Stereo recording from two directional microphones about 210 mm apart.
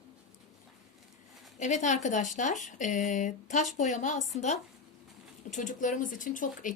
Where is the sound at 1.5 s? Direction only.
35° left (ahead or behind).